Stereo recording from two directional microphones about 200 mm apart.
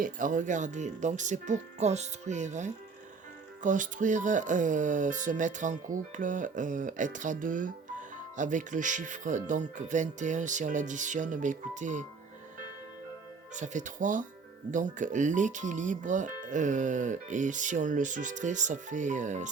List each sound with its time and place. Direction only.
0.0 s speech: 40° right (ahead or behind)
13.5 s speech: 40° right (ahead or behind)